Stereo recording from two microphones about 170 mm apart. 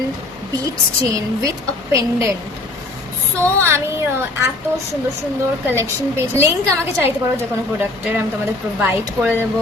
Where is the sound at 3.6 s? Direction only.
15° right (ahead or behind).